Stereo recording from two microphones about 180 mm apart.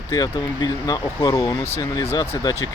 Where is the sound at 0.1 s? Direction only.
20° left (ahead or behind).